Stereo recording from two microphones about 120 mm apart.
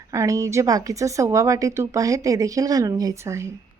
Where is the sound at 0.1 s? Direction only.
25° right (ahead or behind).